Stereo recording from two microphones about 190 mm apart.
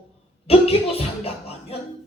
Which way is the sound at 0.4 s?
30° left (ahead or behind).